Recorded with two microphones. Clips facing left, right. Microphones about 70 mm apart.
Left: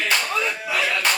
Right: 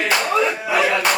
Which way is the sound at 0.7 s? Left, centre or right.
Right.